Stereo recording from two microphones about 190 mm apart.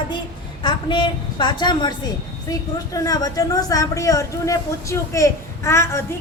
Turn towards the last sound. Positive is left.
turn(degrees=15)  # may be behind; listen again after turning